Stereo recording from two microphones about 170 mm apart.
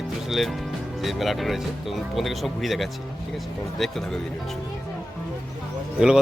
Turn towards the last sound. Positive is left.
turn(degrees=-5)  # may be behind; listen again after turning